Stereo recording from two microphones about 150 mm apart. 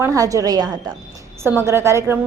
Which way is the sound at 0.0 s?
20° right (ahead or behind).